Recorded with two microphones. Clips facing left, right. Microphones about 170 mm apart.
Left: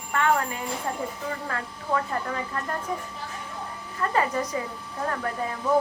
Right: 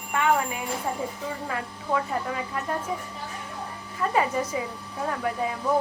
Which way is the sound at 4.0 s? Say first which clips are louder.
Right 1 dB; 10° right (ahead or behind).